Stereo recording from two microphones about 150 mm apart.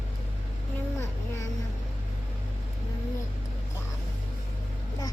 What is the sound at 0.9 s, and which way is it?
Vehicle, 20° left (ahead or behind).